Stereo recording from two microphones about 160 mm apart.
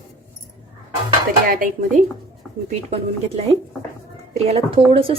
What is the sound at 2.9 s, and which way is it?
A woman's voice, 40° right (ahead or behind).